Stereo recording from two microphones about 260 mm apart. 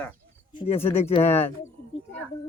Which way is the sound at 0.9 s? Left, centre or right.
Left.